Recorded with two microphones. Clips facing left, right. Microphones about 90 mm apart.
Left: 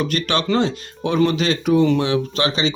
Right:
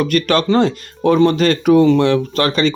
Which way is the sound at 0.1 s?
45° right (ahead or behind).